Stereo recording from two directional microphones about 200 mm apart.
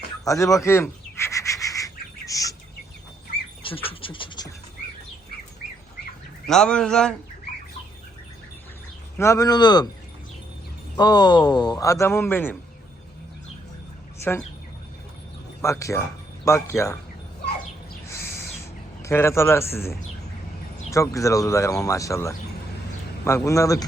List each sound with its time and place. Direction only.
0.3 s bird vocalization: 15° left (ahead or behind)
3.6 s speech: 25° left (ahead or behind)
6.5 s speech: 5° left (ahead or behind)
9.1 s a man's voice: 15° left (ahead or behind)
10.9 s a man's voice: 20° left (ahead or behind)
15.6 s speech: 15° left (ahead or behind)
19.0 s speech: 15° left (ahead or behind)